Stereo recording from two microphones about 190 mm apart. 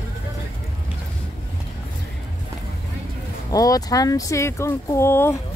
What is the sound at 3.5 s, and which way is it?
Speech, 20° left (ahead or behind).